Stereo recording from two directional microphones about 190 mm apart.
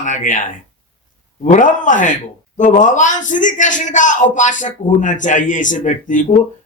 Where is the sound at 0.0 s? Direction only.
40° left (ahead or behind).